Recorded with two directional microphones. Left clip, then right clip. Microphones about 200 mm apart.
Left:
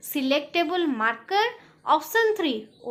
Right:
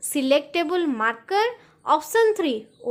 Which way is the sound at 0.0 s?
30° right (ahead or behind).